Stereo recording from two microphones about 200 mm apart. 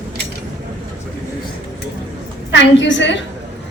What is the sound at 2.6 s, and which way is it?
Speech, 65° left (ahead or behind).